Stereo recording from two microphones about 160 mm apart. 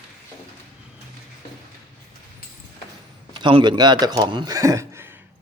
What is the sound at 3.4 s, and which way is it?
Speech, 30° right (ahead or behind).